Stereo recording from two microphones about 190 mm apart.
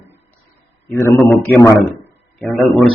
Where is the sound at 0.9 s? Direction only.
10° left (ahead or behind).